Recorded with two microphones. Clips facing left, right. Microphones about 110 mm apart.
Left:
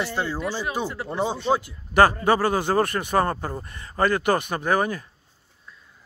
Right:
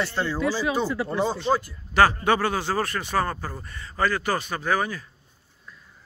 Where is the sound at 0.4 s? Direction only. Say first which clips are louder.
Right 3 dB; 90° right.